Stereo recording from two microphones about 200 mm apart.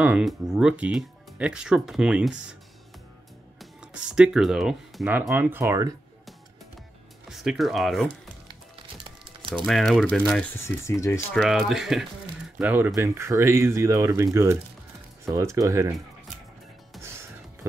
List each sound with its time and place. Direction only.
0.0 s speech: 5° right (ahead or behind)
3.5 s speech: 5° right (ahead or behind)
7.2 s speech: centre (ahead or behind)
9.0 s typing: 25° right (ahead or behind)
9.7 s speech: centre (ahead or behind)
10.6 s speech: 15° left (ahead or behind)
11.3 s speech: centre (ahead or behind)